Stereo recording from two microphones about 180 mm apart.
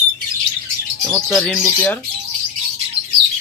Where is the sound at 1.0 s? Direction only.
10° left (ahead or behind).